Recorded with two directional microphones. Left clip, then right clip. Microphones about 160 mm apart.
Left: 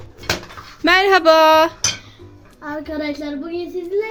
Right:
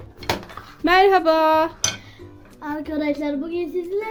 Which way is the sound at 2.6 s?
40° right (ahead or behind).